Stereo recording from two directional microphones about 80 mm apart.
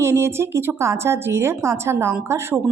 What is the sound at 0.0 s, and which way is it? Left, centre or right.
A woman's voice, right.